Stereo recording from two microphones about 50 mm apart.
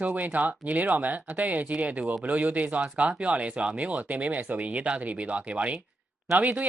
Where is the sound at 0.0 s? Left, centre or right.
Right.